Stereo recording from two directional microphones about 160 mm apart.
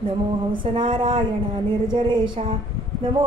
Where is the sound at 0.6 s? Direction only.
30° right (ahead or behind).